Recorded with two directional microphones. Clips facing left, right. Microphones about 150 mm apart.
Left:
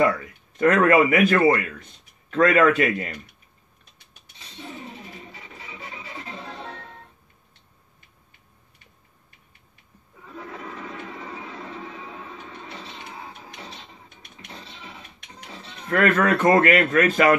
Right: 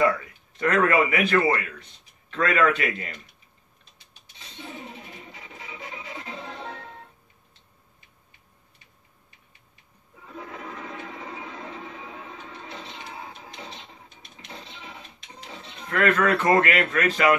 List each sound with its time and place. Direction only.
0.6 s speech: 45° left (ahead or behind)
15.9 s speech: 45° left (ahead or behind)